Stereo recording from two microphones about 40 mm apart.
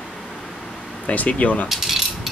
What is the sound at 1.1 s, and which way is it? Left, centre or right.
Speech, left.